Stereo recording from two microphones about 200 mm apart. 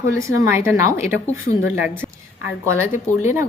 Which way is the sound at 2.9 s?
35° left (ahead or behind).